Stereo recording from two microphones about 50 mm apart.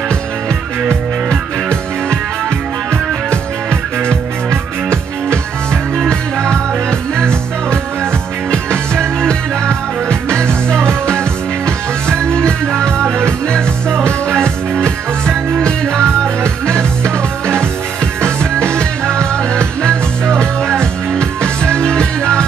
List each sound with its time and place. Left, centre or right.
1.3 s music: centre
4.1 s music: centre
6.0 s music: centre
10.0 s music: centre
10.7 s music: right
11.1 s music: centre
14.0 s music: centre
18.2 s music: centre